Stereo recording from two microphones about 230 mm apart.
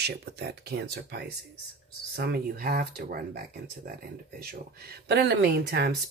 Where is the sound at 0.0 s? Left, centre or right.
Right.